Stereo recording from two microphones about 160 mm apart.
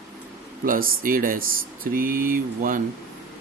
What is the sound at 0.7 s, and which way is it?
Speech, 60° right (ahead or behind).